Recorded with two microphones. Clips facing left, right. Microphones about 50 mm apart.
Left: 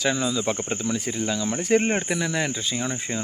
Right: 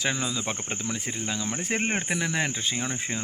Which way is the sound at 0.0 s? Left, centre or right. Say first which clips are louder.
Left 5 dB; right.